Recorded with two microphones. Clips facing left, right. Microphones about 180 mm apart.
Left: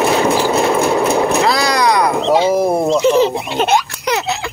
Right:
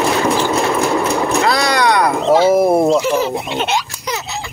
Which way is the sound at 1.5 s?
Centre (ahead or behind).